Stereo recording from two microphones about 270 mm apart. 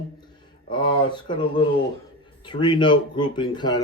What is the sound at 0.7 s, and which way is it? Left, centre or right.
Speech, centre.